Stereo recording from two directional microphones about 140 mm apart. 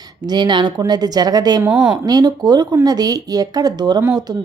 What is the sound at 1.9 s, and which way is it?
A woman's voice, 30° right (ahead or behind).